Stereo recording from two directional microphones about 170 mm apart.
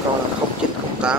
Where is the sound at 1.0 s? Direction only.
5° right (ahead or behind).